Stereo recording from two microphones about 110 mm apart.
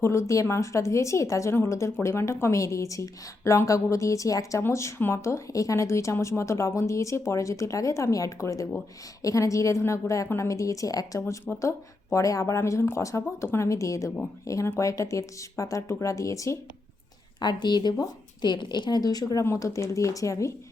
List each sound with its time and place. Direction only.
0.0 s a woman's voice: 25° left (ahead or behind)
17.4 s speech: 40° left (ahead or behind)